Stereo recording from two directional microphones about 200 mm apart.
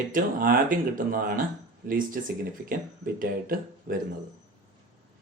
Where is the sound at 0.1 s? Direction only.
45° right (ahead or behind).